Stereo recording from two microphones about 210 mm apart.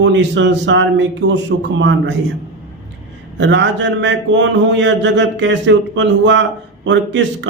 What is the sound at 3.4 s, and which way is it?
A man's voice, 60° right (ahead or behind).